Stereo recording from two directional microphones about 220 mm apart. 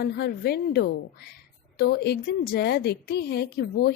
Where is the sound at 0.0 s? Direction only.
45° left (ahead or behind).